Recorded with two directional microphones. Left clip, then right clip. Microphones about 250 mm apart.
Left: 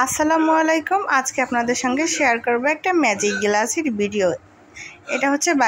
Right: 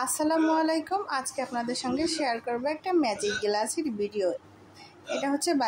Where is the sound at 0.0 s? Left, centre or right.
Centre.